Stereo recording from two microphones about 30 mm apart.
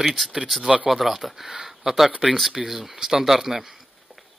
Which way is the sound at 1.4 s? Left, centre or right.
Centre.